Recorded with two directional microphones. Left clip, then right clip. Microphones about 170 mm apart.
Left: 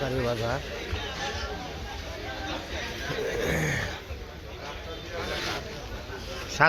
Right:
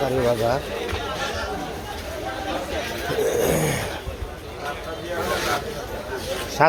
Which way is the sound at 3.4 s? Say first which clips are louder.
Right 6 dB; 20° right (ahead or behind).